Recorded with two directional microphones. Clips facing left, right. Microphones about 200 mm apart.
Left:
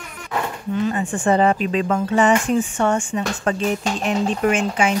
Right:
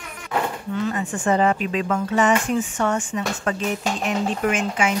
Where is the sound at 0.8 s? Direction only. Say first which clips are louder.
Left 3 dB; 30° left (ahead or behind).